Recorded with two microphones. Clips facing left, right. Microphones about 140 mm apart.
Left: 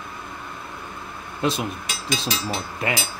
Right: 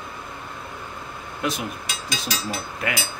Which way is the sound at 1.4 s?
30° left (ahead or behind).